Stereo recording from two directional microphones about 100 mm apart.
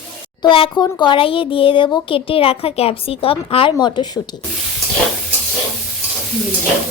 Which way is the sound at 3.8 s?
50° left (ahead or behind).